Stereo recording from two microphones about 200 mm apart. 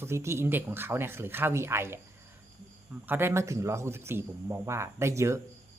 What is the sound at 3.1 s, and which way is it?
Speech, 10° right (ahead or behind).